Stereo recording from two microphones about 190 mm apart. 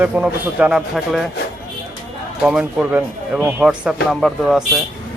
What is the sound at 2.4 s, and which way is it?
Speech, 5° right (ahead or behind).